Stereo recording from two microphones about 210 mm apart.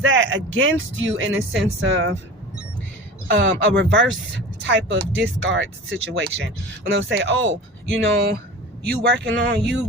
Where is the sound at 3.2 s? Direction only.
60° right (ahead or behind).